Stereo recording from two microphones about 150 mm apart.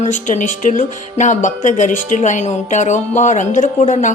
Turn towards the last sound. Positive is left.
turn(degrees=55)  # may be behind; listen again after turning